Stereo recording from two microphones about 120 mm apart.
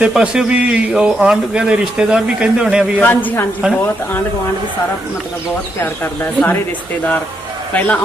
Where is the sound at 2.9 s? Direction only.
15° left (ahead or behind).